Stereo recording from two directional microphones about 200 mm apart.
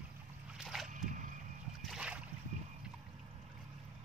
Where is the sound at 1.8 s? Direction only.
5° right (ahead or behind).